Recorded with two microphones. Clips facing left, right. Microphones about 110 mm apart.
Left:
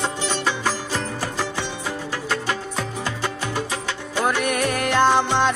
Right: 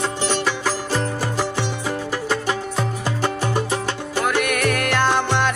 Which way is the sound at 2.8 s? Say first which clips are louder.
Right 3 dB; 35° right (ahead or behind).